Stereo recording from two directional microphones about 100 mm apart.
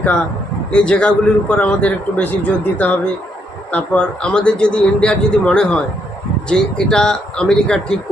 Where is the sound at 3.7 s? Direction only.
10° left (ahead or behind).